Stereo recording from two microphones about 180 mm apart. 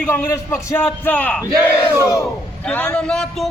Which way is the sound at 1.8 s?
20° left (ahead or behind).